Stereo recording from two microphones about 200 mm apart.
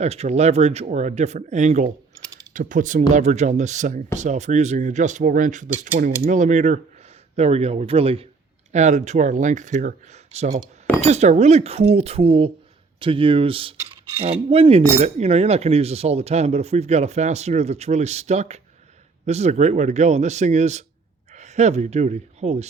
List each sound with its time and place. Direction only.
0.0 s speech: 35° right (ahead or behind)
2.2 s mechanisms: 20° right (ahead or behind)
2.5 s speech: 40° right (ahead or behind)
11.0 s speech: 35° right (ahead or behind)